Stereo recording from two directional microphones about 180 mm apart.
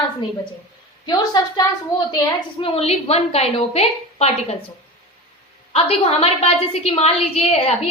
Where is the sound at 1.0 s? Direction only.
25° left (ahead or behind).